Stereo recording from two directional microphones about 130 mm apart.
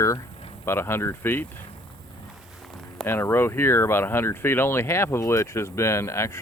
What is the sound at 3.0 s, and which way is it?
Speech, 15° left (ahead or behind).